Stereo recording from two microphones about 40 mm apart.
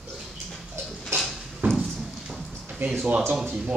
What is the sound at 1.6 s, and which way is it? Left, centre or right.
Horse, right.